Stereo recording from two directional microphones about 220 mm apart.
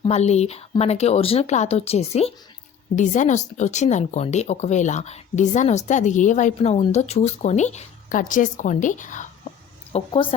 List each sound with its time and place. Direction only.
0.0 s speech: 30° left (ahead or behind)
9.9 s speech: 25° left (ahead or behind)